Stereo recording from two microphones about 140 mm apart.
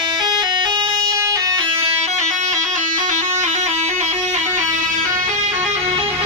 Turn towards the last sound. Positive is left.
turn(degrees=-55)  # may be behind; listen again after turning